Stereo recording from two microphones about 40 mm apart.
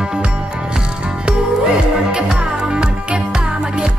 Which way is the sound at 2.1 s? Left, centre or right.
Right.